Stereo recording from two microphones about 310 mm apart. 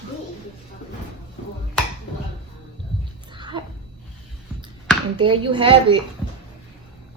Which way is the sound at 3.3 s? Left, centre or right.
Centre.